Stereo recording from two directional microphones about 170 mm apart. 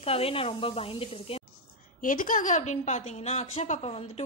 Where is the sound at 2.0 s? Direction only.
50° left (ahead or behind).